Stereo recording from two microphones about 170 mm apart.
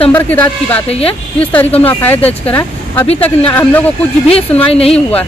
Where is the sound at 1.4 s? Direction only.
10° left (ahead or behind).